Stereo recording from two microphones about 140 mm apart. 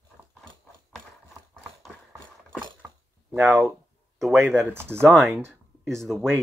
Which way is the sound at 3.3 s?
Centre (ahead or behind).